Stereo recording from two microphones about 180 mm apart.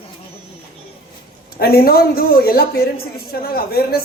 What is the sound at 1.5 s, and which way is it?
A man's voice, 55° left (ahead or behind).